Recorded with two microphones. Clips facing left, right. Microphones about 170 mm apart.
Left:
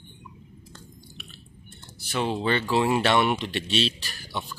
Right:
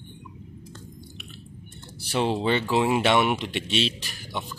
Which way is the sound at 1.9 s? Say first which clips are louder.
Right 3 dB; 30° right (ahead or behind).